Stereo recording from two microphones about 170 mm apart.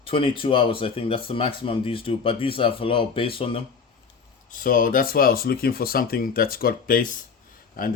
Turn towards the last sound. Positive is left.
turn(degrees=60)  # may be behind; listen again after turning